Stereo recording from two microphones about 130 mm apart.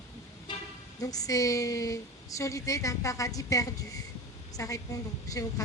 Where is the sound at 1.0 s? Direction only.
30° left (ahead or behind).